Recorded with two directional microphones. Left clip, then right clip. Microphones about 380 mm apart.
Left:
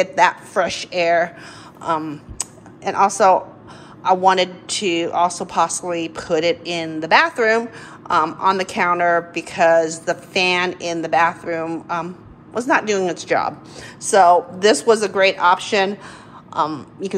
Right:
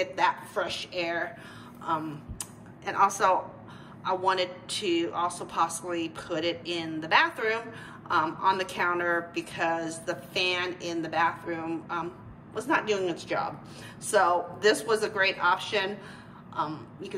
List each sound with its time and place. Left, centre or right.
0.0 s speech: centre
1.8 s computer keyboard: centre
4.0 s a woman's voice: centre